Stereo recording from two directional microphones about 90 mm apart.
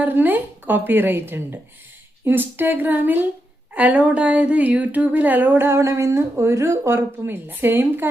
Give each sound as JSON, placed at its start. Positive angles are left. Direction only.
{"t": 0.0, "sound": "speech", "side_deg": -20}